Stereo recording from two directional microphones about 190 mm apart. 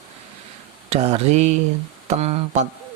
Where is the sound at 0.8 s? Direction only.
35° right (ahead or behind).